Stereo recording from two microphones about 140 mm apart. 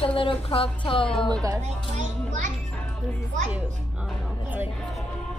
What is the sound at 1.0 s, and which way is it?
Speech, 5° left (ahead or behind).